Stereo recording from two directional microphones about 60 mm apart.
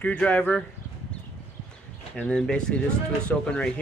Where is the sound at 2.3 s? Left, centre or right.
Centre.